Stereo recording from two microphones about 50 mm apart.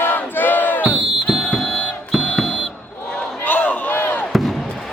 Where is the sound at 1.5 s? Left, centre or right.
Centre.